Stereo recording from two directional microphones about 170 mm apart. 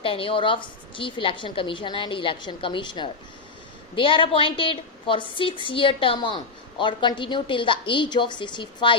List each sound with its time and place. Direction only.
0.0 s a woman's voice: 30° left (ahead or behind)